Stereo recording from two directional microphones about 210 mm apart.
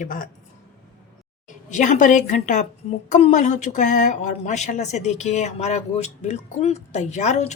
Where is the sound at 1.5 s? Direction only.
35° left (ahead or behind).